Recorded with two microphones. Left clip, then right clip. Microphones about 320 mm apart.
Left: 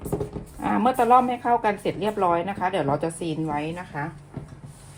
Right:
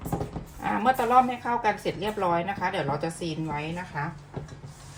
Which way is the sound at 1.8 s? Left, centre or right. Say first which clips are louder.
Left 4 dB; centre.